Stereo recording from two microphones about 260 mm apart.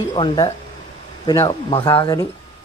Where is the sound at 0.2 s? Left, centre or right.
Centre.